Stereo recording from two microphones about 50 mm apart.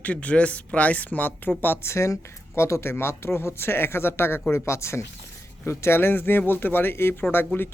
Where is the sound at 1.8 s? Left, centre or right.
Left.